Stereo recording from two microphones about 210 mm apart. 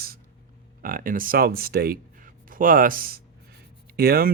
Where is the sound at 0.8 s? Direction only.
40° right (ahead or behind).